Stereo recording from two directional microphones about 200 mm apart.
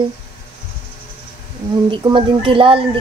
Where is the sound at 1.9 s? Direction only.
25° right (ahead or behind).